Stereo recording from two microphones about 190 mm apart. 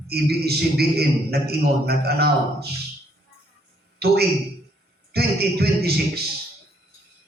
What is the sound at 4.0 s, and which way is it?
A man's voice, 55° right (ahead or behind).